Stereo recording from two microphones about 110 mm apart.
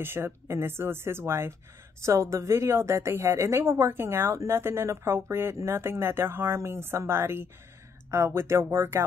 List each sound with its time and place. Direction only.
0.0 s a woman's voice: 20° right (ahead or behind)